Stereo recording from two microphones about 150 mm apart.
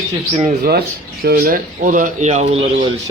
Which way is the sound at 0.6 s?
85° right.